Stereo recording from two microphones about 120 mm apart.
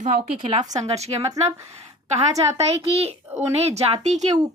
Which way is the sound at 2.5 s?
55° right (ahead or behind).